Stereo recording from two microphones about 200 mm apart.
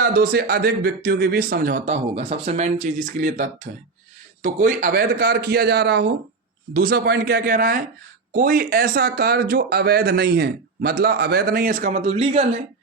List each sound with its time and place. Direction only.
0.0 s speech: 50° right (ahead or behind); by 12.5 s 30° right (ahead or behind)